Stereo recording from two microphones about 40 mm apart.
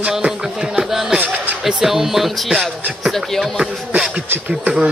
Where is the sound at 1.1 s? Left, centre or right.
Right.